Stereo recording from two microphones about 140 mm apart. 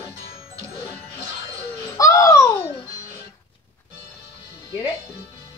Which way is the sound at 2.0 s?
25° left (ahead or behind).